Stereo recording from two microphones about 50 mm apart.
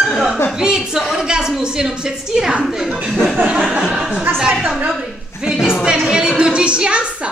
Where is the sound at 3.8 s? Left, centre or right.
Centre.